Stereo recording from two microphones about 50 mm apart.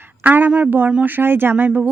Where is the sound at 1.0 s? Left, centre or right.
Right.